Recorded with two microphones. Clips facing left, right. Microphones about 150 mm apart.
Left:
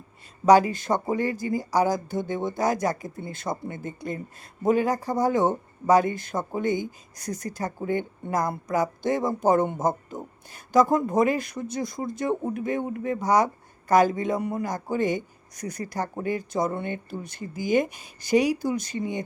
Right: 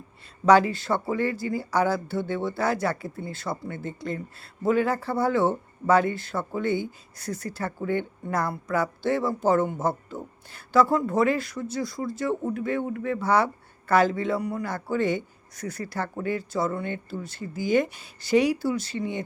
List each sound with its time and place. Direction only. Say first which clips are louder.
0.4 s speech: left 1 dB; 15° left (ahead or behind)